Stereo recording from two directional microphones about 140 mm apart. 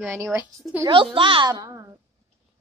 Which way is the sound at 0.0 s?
15° right (ahead or behind).